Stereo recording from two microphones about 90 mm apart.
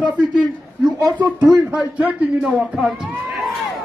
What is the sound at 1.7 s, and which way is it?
A man's voice, 15° right (ahead or behind).